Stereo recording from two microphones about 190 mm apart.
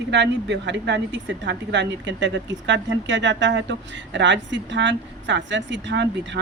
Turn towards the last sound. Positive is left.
turn(degrees=-70)  # may be behind; listen again after turning